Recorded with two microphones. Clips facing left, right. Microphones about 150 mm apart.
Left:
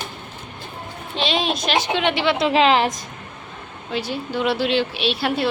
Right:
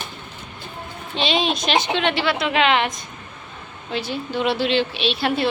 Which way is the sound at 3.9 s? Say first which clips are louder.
Even; 10° left (ahead or behind).